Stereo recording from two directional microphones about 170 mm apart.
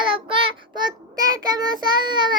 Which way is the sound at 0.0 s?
30° right (ahead or behind).